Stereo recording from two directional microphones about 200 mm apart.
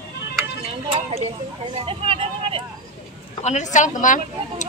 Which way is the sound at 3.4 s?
35° left (ahead or behind).